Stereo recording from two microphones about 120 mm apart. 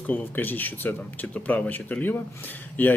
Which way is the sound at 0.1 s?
15° left (ahead or behind).